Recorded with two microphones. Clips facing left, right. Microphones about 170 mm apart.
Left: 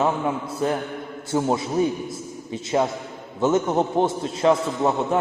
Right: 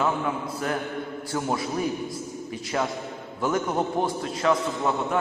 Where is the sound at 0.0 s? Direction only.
25° left (ahead or behind).